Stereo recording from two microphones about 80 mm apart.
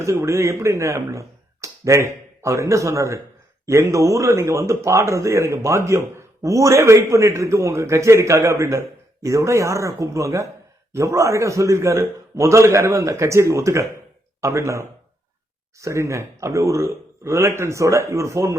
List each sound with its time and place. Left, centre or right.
0.0 s speech: right